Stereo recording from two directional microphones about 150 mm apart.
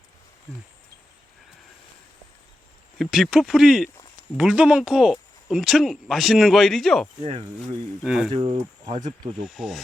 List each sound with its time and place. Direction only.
0.5 s speech: centre (ahead or behind)
3.0 s speech: centre (ahead or behind)
7.2 s speech: 40° right (ahead or behind)
8.0 s speech: 5° right (ahead or behind)
8.3 s speech: 35° right (ahead or behind)
9.4 s speech: centre (ahead or behind)